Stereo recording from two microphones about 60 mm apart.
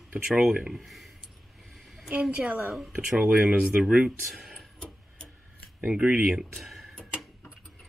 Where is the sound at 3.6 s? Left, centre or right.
Centre.